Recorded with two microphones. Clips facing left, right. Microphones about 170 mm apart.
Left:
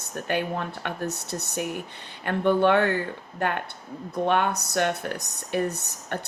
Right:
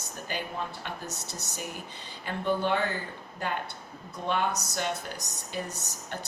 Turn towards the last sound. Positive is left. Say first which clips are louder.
# left 5 dB
turn(degrees=60)  # may be behind; listen again after turning